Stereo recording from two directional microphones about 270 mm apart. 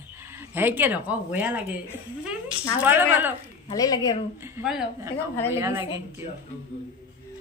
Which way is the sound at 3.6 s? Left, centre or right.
Centre.